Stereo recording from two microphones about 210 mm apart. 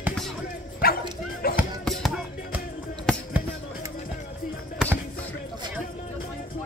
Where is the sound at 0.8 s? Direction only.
45° left (ahead or behind).